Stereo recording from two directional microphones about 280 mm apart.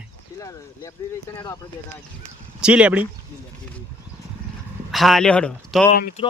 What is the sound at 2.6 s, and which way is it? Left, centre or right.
Speech, centre.